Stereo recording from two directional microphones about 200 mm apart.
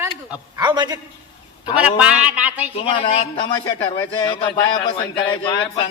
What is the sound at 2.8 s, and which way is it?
A man's voice, 25° left (ahead or behind).